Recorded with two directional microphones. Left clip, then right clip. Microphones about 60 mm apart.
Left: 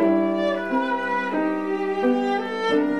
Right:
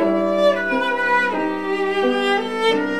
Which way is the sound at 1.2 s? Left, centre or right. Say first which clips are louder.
Right 3 dB; centre.